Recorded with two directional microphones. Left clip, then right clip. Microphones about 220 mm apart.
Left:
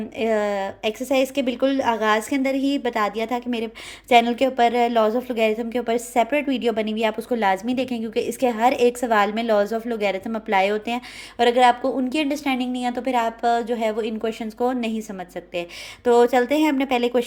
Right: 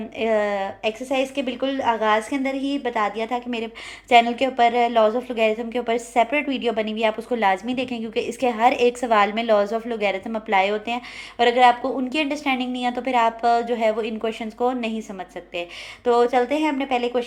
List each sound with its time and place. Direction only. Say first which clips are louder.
0.2 s a woman's voice: right 1 dB; 30° left (ahead or behind)
16.0 s a woman's voice: left 2 dB; 35° left (ahead or behind)